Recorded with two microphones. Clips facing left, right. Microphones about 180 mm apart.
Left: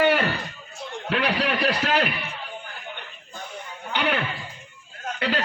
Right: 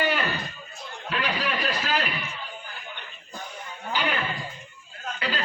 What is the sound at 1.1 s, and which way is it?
A man's voice, 65° left (ahead or behind).